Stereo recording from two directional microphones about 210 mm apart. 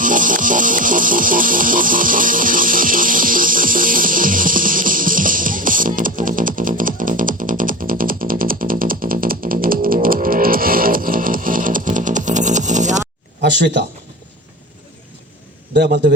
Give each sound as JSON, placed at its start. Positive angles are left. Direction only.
{"t": 0.0, "sound": "music", "side_deg": -40}
{"t": 13.4, "sound": "a sound", "side_deg": -55}
{"t": 15.7, "sound": "a man's voice", "side_deg": -50}